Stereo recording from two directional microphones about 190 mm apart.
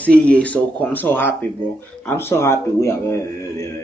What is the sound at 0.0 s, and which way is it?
Speech, 5° left (ahead or behind).